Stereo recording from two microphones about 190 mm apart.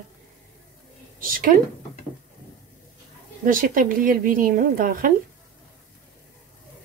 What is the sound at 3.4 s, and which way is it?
Speech, 45° right (ahead or behind).